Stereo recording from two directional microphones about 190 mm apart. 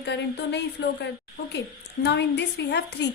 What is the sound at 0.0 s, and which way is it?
A woman's voice, 65° left (ahead or behind).